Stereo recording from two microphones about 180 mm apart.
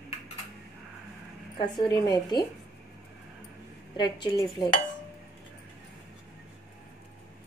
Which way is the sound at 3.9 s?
25° left (ahead or behind).